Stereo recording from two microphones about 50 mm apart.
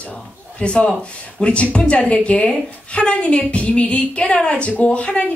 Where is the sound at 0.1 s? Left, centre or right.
Left.